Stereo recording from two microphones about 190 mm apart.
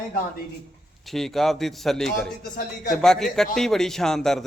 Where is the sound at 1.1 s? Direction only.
Centre (ahead or behind).